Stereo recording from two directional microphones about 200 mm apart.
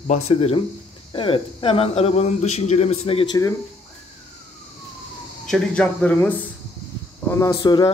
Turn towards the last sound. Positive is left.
turn(degrees=20)  # may be behind; listen again after turning